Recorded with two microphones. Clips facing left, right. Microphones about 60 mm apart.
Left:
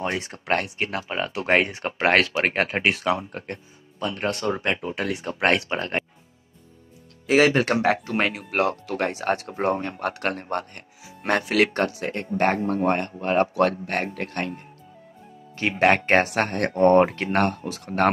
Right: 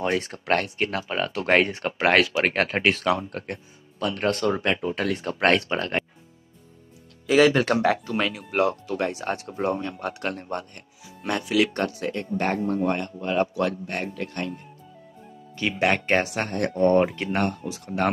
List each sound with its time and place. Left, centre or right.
0.0 s speech: left
2.5 s speech: left
7.2 s speech: left
12.8 s speech: left
15.5 s speech: left
17.3 s speech: left